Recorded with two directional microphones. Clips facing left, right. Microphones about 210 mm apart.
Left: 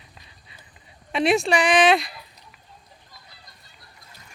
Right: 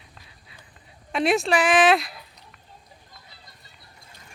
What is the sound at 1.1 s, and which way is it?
Speech, centre (ahead or behind).